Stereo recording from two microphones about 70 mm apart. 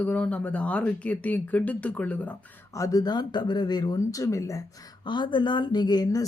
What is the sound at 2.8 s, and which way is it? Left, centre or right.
Speech, left.